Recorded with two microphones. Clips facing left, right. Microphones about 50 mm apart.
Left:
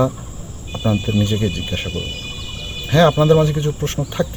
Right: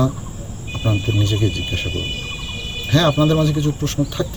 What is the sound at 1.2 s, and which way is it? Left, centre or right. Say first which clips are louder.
Speech: left 1 dB; left.